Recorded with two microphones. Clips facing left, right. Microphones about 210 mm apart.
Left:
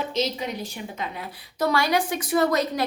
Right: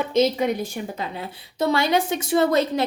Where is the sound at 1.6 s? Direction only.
25° right (ahead or behind).